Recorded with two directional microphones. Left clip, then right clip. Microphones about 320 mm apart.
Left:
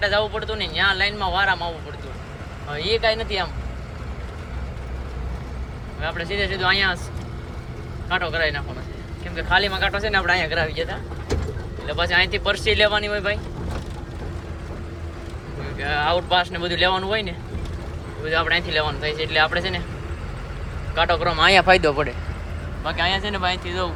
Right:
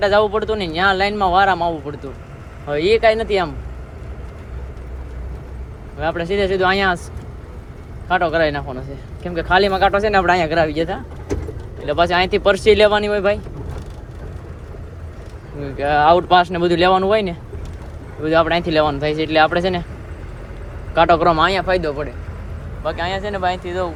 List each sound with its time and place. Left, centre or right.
0.0 s speech: centre
6.0 s speech: centre
8.1 s speech: centre
15.8 s speech: centre
20.9 s speech: centre